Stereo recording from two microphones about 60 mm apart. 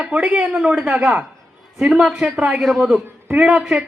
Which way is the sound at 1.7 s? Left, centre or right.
Centre.